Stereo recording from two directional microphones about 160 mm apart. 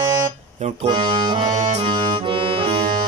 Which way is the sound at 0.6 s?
45° right (ahead or behind).